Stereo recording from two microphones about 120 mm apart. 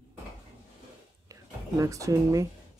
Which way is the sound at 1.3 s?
25° right (ahead or behind).